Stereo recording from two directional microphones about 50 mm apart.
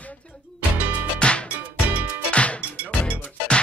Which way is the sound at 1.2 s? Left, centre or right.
Left.